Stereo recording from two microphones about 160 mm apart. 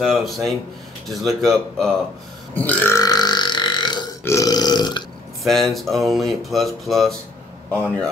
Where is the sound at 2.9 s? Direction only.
25° left (ahead or behind).